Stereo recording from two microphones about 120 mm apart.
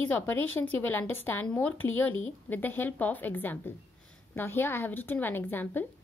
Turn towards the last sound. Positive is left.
turn(degrees=15)  # may be behind; listen again after turning